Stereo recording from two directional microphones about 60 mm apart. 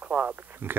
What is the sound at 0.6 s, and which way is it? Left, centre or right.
Speech, right.